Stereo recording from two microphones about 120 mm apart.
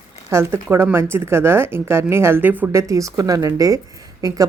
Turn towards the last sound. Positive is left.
turn(degrees=-30)  # may be behind; listen again after turning